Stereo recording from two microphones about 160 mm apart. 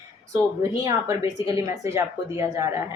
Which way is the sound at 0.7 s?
20° right (ahead or behind).